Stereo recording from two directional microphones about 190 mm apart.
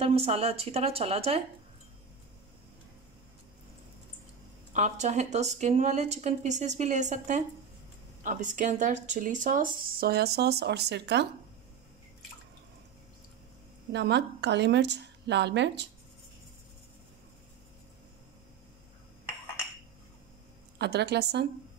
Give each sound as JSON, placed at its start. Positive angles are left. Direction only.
{"t": 0.0, "sound": "speech", "side_deg": -30}
{"t": 4.7, "sound": "speech", "side_deg": -40}
{"t": 13.9, "sound": "a woman's voice", "side_deg": -65}
{"t": 20.7, "sound": "a woman's voice", "side_deg": -60}